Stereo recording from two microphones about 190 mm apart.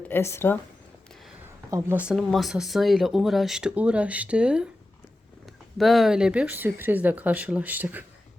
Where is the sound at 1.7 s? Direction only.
15° right (ahead or behind).